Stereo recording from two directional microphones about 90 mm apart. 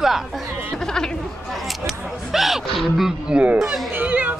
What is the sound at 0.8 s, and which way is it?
Speech, 5° left (ahead or behind).